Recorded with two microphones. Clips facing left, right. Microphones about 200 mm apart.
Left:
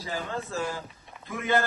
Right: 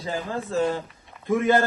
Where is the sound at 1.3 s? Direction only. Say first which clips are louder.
Right 7 dB; 50° right (ahead or behind).